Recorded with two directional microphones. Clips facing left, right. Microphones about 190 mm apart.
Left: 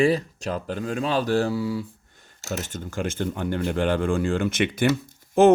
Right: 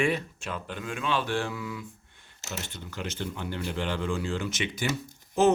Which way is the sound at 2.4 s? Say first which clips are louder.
Left 8 dB; 45° left (ahead or behind).